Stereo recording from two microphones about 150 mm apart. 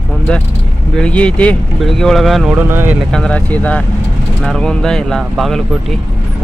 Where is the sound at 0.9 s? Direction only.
5° left (ahead or behind).